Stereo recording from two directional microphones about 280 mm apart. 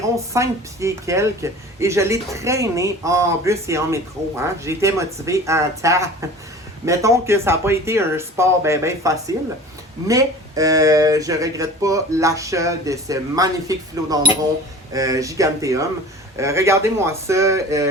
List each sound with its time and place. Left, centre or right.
0.3 s a woman's voice: centre